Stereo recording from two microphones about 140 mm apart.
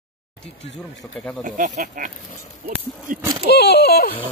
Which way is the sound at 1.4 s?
65° right (ahead or behind).